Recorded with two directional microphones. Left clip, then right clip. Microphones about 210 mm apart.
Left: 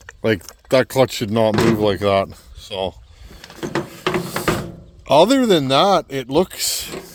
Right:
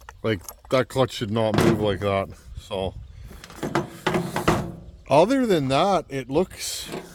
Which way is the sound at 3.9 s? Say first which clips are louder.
Left 3 dB; 40° left (ahead or behind).